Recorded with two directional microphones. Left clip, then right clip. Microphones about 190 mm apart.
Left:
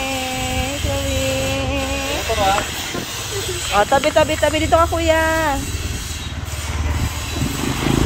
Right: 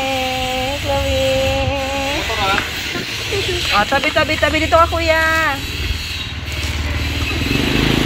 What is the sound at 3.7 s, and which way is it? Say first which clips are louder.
Speech: left 1 dB; 20° left (ahead or behind).